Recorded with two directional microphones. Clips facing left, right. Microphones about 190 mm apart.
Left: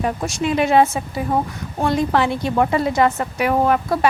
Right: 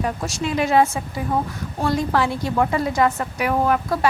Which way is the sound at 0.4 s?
20° left (ahead or behind).